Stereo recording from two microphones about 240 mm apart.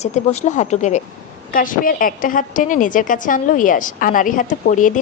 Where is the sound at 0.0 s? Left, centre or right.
Left.